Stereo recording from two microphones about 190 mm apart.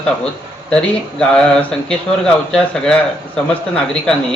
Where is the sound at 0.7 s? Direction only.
5° left (ahead or behind).